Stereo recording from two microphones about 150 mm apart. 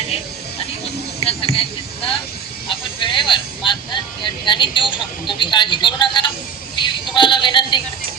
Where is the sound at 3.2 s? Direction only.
35° left (ahead or behind).